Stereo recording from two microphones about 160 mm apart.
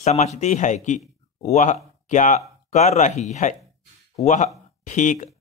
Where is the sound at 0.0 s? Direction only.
45° left (ahead or behind).